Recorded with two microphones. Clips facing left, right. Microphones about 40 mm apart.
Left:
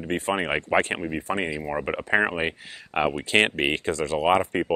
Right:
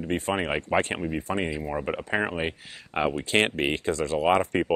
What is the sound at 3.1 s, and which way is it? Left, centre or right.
Speech, left.